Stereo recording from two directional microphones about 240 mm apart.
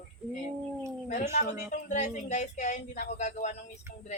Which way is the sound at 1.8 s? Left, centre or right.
Left.